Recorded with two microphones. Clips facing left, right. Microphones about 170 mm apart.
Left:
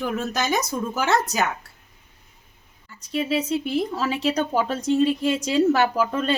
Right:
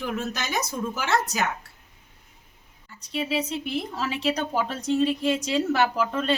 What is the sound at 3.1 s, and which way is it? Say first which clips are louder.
Speech: left 4 dB; 45° left (ahead or behind).